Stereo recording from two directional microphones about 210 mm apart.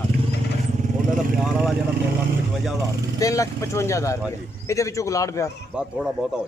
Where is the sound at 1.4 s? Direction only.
Centre (ahead or behind).